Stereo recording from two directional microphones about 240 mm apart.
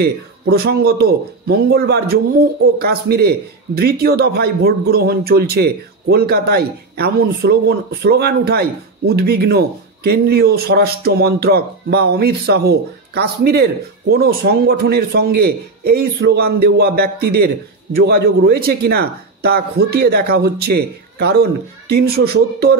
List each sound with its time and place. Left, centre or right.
0.0 s a man's voice: right